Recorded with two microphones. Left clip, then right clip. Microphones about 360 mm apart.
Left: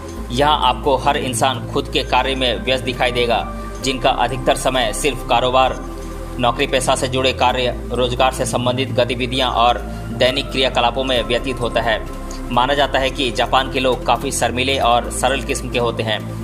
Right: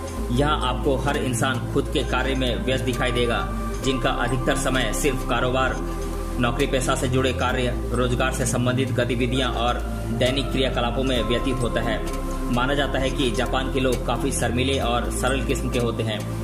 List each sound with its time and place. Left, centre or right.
0.3 s a man's voice: centre